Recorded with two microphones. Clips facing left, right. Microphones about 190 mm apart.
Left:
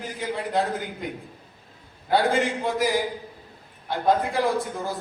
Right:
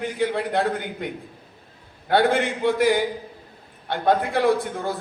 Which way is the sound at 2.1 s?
65° right (ahead or behind).